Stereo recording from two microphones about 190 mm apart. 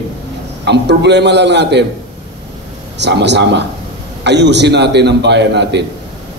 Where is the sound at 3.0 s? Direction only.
65° right (ahead or behind).